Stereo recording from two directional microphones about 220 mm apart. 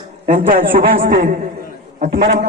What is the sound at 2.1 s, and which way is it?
Speech, 50° right (ahead or behind).